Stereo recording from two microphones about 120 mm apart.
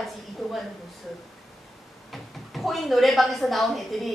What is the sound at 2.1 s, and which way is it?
Speech, centre (ahead or behind).